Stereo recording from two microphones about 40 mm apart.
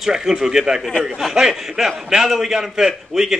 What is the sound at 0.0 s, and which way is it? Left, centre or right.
A man's voice, centre.